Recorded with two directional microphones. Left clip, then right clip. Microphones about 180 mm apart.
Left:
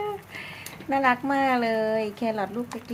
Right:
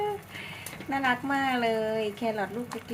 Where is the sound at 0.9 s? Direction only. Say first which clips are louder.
Left 5 dB; 30° left (ahead or behind).